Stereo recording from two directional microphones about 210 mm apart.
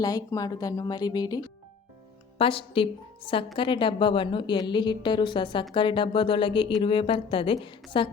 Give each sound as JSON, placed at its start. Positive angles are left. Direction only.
{"t": 0.0, "sound": "a woman's voice", "side_deg": 15}
{"t": 2.4, "sound": "a woman's voice", "side_deg": 25}